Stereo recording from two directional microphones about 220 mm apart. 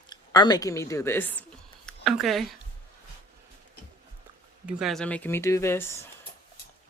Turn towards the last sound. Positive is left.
turn(degrees=10)  # may be behind; listen again after turning